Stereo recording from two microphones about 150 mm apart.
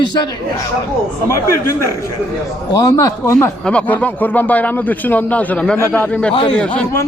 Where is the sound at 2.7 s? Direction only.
25° left (ahead or behind).